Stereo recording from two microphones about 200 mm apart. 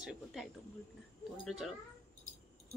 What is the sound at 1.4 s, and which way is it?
Speech, centre (ahead or behind).